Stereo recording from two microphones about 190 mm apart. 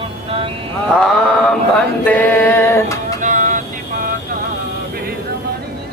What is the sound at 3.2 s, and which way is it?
Vehicle, 40° right (ahead or behind).